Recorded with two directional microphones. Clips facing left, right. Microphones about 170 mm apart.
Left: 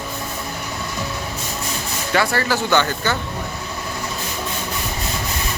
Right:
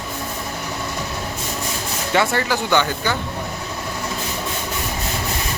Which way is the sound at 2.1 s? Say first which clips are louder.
Even; 20° right (ahead or behind).